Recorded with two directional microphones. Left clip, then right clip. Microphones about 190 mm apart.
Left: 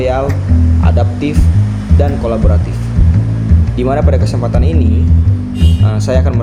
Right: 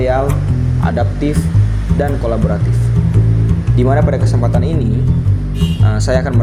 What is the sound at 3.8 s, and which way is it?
Speech, 10° right (ahead or behind).